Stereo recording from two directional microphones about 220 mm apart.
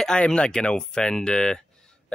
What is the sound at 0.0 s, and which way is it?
Speech, 5° left (ahead or behind).